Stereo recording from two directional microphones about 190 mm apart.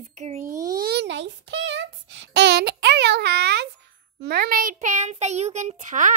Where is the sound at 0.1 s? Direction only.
35° right (ahead or behind).